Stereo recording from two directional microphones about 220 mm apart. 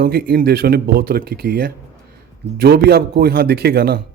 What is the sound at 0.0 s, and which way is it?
A man's voice, 45° right (ahead or behind).